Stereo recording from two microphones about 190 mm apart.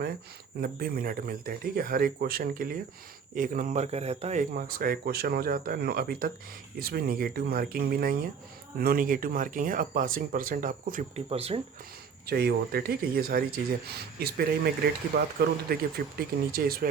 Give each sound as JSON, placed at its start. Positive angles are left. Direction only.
{"t": 0.6, "sound": "speech", "side_deg": -50}
{"t": 11.3, "sound": "speech", "side_deg": -30}
{"t": 12.2, "sound": "speech", "side_deg": -55}